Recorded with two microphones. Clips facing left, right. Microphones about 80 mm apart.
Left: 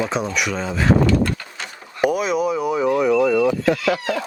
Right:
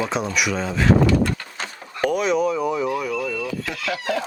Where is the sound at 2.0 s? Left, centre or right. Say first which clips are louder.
Left 1 dB; centre.